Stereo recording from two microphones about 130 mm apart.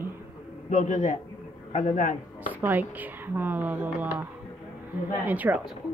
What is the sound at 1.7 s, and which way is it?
Speech, 85° left.